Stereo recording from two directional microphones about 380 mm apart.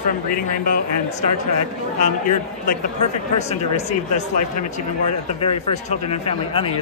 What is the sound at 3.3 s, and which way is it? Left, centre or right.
Speech, centre.